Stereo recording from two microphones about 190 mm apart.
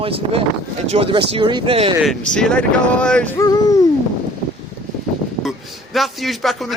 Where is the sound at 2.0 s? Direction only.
5° left (ahead or behind).